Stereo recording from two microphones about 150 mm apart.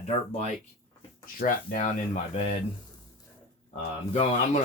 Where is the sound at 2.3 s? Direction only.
45° left (ahead or behind).